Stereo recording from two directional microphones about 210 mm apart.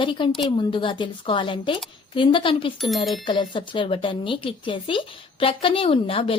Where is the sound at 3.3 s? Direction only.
25° left (ahead or behind).